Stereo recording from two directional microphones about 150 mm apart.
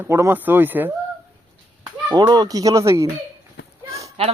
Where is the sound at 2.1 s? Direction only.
30° right (ahead or behind).